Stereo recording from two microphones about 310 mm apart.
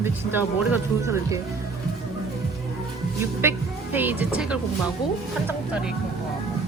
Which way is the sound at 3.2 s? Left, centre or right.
Centre.